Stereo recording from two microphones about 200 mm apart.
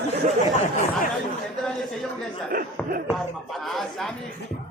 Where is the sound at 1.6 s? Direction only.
Centre (ahead or behind).